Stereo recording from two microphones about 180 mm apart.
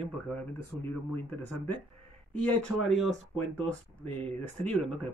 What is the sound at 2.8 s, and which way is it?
Speech, centre (ahead or behind).